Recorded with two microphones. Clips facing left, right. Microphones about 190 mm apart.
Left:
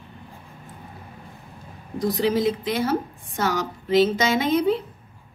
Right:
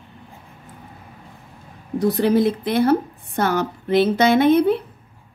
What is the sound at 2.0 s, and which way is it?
A child's voice, 65° right (ahead or behind).